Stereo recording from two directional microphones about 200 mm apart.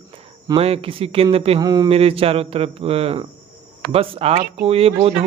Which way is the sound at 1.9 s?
30° right (ahead or behind).